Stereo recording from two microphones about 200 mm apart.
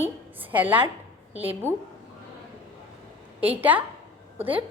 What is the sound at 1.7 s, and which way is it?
Speech, 10° right (ahead or behind).